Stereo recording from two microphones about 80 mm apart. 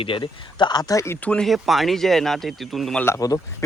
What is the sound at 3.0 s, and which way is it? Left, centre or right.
Speech, left.